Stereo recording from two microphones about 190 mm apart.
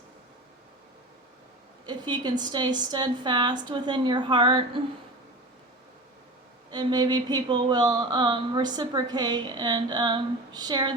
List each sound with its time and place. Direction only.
1.9 s speech: 25° right (ahead or behind)
6.7 s speech: 20° right (ahead or behind)